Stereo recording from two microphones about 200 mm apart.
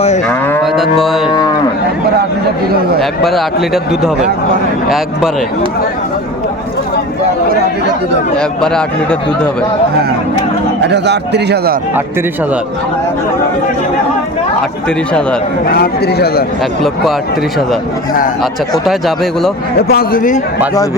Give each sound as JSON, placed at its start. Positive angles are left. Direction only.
{"t": 0.3, "sound": "moo", "side_deg": 10}
{"t": 0.6, "sound": "moo", "side_deg": 0}
{"t": 1.0, "sound": "speech", "side_deg": 0}
{"t": 3.0, "sound": "speech", "side_deg": 0}
{"t": 8.4, "sound": "speech", "side_deg": 5}
{"t": 10.8, "sound": "a man's voice", "side_deg": -60}
{"t": 14.8, "sound": "speech", "side_deg": 5}
{"t": 15.6, "sound": "a man's voice", "side_deg": 50}
{"t": 18.9, "sound": "speech", "side_deg": 0}
{"t": 19.9, "sound": "a man's voice", "side_deg": 45}